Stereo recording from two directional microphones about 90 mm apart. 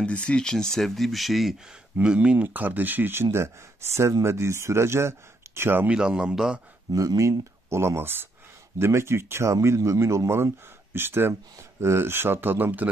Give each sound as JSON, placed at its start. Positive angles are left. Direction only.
{"t": 0.0, "sound": "speech", "side_deg": 10}
{"t": 2.0, "sound": "speech", "side_deg": -15}
{"t": 5.9, "sound": "speech", "side_deg": -10}
{"t": 6.9, "sound": "speech", "side_deg": -40}